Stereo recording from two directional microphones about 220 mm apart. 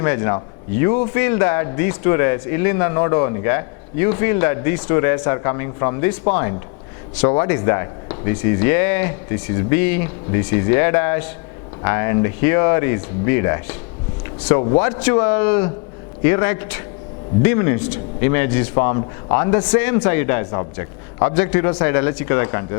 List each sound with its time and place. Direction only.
0.0 s a man's voice: 15° left (ahead or behind)
7.2 s a man's voice: 15° left (ahead or behind)